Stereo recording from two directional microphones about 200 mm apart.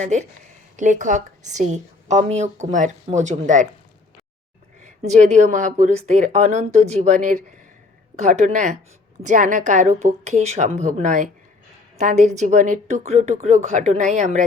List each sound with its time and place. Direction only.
0.0 s a woman's voice: 35° right (ahead or behind)
4.8 s a woman's voice: 35° right (ahead or behind)